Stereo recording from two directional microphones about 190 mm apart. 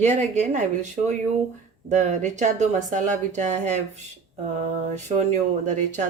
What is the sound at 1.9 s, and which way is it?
Speech, 40° right (ahead or behind).